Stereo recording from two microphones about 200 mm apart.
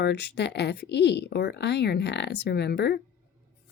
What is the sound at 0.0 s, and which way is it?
Speech, 55° left (ahead or behind).